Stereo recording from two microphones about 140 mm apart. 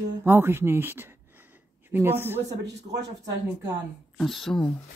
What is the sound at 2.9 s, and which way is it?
Speech, 55° right (ahead or behind).